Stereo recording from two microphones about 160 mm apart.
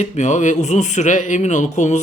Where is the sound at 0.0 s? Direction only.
45° left (ahead or behind).